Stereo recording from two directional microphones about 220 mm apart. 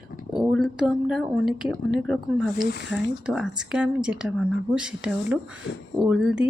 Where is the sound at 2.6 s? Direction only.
50° left (ahead or behind).